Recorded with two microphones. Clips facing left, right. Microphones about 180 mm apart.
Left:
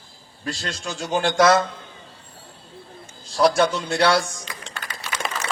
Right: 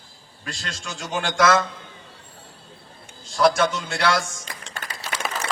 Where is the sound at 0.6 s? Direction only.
40° left (ahead or behind).